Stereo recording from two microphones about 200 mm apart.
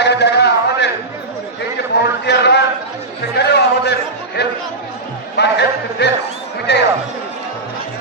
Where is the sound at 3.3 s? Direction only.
55° left (ahead or behind).